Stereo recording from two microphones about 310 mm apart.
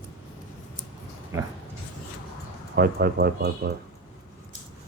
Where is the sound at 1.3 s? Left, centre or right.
Centre.